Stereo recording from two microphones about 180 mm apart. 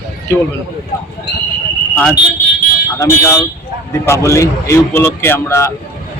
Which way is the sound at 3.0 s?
15° left (ahead or behind).